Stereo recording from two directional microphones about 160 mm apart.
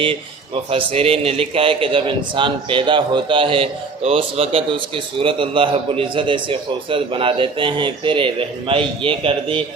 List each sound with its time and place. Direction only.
0.0 s a man's voice: 35° right (ahead or behind)